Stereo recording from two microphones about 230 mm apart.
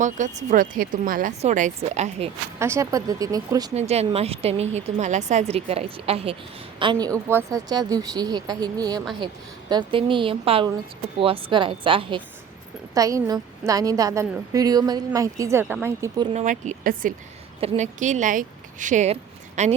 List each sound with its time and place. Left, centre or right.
0.0 s speech: right
2.6 s a woman's voice: centre
3.8 s a woman's voice: right
16.3 s speech: right